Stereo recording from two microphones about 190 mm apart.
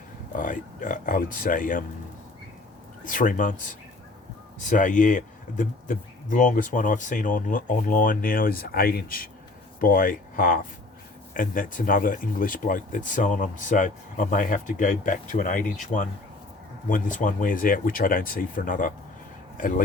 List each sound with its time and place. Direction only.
0.3 s speech: 45° left (ahead or behind)
3.0 s speech: 45° left (ahead or behind)